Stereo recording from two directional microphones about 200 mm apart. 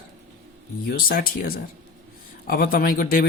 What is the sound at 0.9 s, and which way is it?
A man's voice, 45° left (ahead or behind).